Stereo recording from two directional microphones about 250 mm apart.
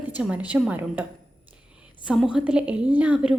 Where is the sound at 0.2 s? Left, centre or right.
Centre.